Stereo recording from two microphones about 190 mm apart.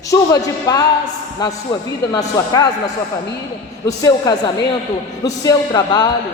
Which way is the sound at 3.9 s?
20° left (ahead or behind).